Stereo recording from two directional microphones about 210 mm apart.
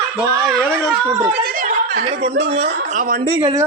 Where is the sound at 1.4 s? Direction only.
45° right (ahead or behind).